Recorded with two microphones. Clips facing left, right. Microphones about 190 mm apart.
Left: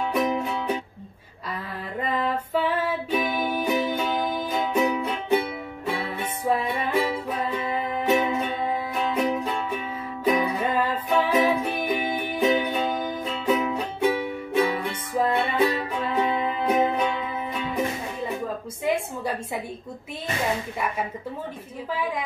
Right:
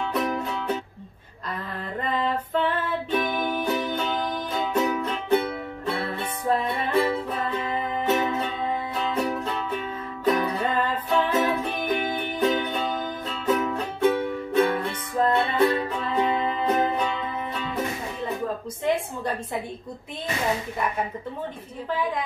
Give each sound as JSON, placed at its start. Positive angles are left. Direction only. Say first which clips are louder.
{"t": 0.1, "sound": "music", "louder": "left 2 dB", "side_deg": 10}
{"t": 2.0, "sound": "music", "louder": "even", "side_deg": 5}
{"t": 18.9, "sound": "a sound", "louder": "even", "side_deg": 5}